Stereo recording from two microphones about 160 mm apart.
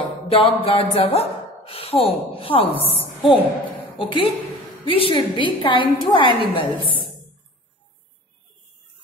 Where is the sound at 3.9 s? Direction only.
30° left (ahead or behind).